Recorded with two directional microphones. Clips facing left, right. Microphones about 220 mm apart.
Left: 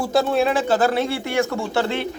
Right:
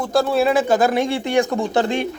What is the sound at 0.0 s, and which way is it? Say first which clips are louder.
Speech: right 1 dB; centre (ahead or behind).